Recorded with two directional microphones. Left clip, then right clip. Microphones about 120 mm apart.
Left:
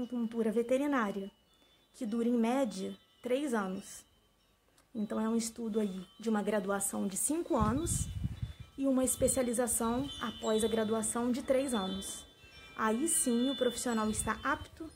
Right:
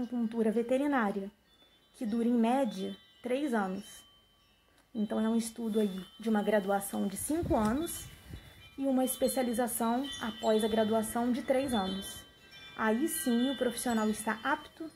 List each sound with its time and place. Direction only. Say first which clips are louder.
0.1 s speech: right 2 dB; 15° left (ahead or behind)
5.0 s a woman's voice: right 2 dB; 15° left (ahead or behind)